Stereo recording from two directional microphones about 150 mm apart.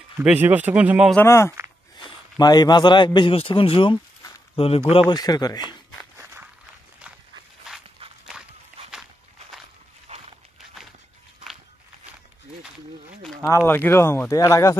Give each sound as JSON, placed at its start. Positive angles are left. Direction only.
{"t": 0.2, "sound": "speech", "side_deg": -10}
{"t": 1.1, "sound": "a man's voice", "side_deg": 15}
{"t": 5.1, "sound": "speech", "side_deg": 25}
{"t": 6.1, "sound": "walk", "side_deg": -15}
{"t": 10.1, "sound": "walk", "side_deg": -45}
{"t": 13.5, "sound": "speech", "side_deg": 15}